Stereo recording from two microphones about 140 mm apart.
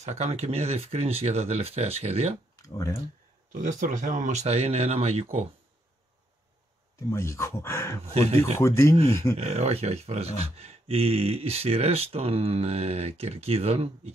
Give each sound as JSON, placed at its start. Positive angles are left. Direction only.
{"t": 0.0, "sound": "speech", "side_deg": -55}
{"t": 2.5, "sound": "a sound", "side_deg": 25}
{"t": 3.5, "sound": "speech", "side_deg": -65}
{"t": 7.1, "sound": "speech", "side_deg": 20}
{"t": 9.4, "sound": "speech", "side_deg": -50}